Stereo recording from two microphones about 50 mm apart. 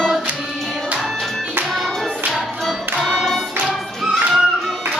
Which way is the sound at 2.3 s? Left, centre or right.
Centre.